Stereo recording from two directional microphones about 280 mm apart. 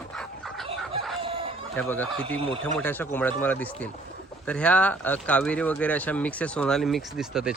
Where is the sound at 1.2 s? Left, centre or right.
Centre.